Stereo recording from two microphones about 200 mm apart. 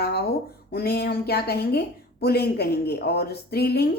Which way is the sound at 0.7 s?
50° left (ahead or behind).